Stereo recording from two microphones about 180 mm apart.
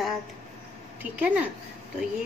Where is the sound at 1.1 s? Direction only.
10° right (ahead or behind).